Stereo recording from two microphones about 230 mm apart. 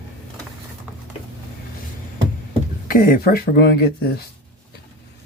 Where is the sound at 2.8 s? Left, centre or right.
Left.